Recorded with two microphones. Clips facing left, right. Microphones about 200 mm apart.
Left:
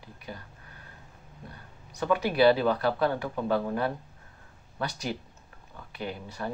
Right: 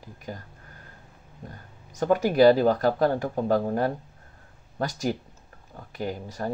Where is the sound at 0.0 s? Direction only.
45° right (ahead or behind).